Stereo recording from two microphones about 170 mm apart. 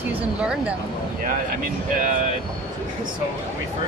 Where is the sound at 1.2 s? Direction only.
50° right (ahead or behind).